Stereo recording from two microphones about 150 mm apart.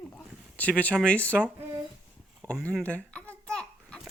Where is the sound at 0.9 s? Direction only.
10° left (ahead or behind).